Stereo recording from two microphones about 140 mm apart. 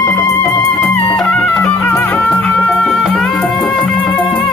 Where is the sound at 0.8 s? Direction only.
5° left (ahead or behind).